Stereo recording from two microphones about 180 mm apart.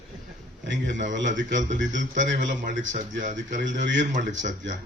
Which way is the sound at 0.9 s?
45° right (ahead or behind).